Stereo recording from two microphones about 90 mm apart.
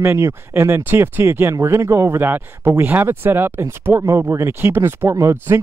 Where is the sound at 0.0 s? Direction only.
25° right (ahead or behind).